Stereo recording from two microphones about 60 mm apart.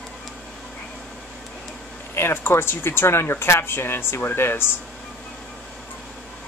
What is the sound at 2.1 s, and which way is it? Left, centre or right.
Speech, left.